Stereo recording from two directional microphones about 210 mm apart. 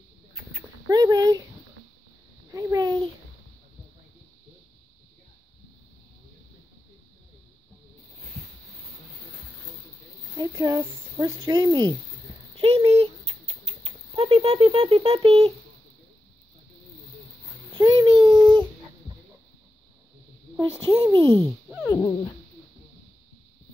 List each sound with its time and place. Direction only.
0.6 s a sound: 15° right (ahead or behind)
2.5 s babbling: 15° right (ahead or behind)
10.3 s a sound: 20° right (ahead or behind)
12.5 s rodents: 25° right (ahead or behind)
17.7 s child singing: 20° right (ahead or behind)
20.9 s a child's voice: 15° right (ahead or behind)
21.8 s dog: 10° left (ahead or behind)